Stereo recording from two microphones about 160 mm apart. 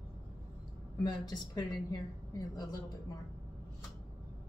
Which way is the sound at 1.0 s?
25° left (ahead or behind).